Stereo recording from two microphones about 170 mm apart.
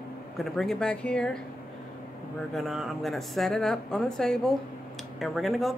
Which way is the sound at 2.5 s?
Centre (ahead or behind).